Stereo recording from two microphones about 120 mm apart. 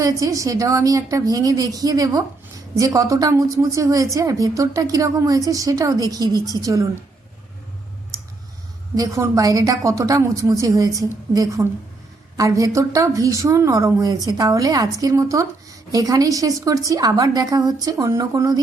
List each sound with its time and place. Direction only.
0.0 s a woman's voice: 30° right (ahead or behind)
9.0 s a woman's voice: 30° right (ahead or behind)